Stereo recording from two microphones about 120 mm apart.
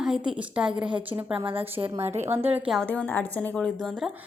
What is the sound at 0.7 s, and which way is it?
Speech, 40° right (ahead or behind).